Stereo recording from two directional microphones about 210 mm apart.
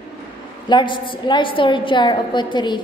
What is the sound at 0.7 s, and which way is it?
A woman's voice, 20° left (ahead or behind).